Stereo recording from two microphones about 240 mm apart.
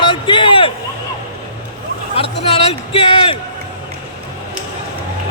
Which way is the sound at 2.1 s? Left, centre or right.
Left.